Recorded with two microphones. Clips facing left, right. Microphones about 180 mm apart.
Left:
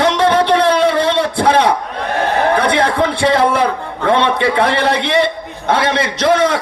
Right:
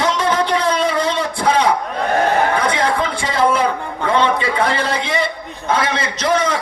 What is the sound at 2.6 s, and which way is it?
A man's voice, 65° left (ahead or behind).